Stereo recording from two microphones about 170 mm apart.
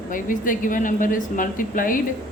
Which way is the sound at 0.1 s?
50° left (ahead or behind).